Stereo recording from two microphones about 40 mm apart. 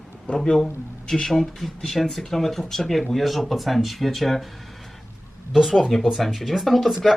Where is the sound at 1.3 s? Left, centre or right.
Centre.